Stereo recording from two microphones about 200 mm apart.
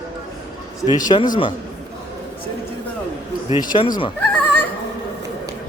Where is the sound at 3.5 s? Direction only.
25° left (ahead or behind).